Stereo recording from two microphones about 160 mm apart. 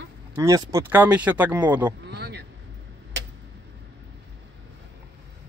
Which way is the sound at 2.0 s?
90° right.